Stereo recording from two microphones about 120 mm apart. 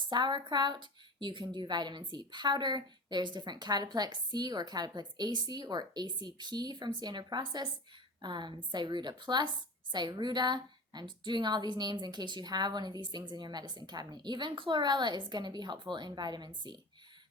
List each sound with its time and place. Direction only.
0.1 s a woman's voice: 40° right (ahead or behind)